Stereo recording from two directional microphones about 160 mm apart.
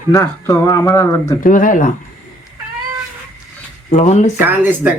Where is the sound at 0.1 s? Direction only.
15° left (ahead or behind).